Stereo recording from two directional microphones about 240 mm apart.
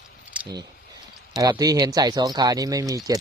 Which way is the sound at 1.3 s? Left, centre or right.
Centre.